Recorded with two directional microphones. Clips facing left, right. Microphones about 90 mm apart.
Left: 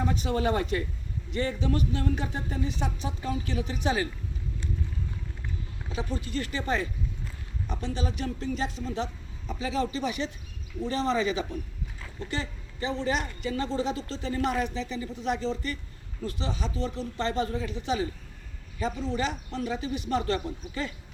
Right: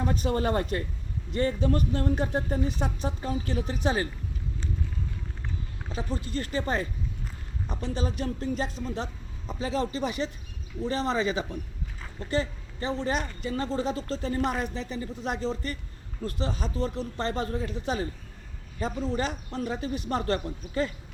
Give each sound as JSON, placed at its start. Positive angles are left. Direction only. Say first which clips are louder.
{"t": 0.1, "sound": "a woman's voice", "louder": "right 1 dB", "side_deg": -45}
{"t": 5.9, "sound": "speech", "louder": "even", "side_deg": -35}
{"t": 7.7, "sound": "a man's voice", "louder": "right 1 dB", "side_deg": -35}
{"t": 19.1, "sound": "a woman's voice", "louder": "even", "side_deg": -45}